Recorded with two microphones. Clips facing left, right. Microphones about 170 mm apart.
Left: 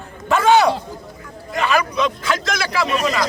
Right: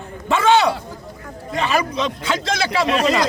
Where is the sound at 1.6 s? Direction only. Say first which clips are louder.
Left 2 dB; 30° right (ahead or behind).